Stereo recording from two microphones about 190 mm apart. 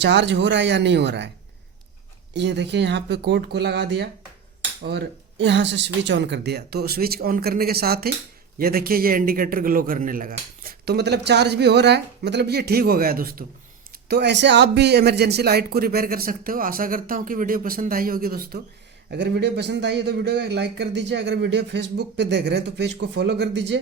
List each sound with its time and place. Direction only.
0.0 s speech: 65° right (ahead or behind)
2.3 s a man's voice: 65° right (ahead or behind); by 13.4 s 50° right (ahead or behind)
14.1 s a man's voice: 65° right (ahead or behind)
19.1 s a man's voice: 65° right (ahead or behind)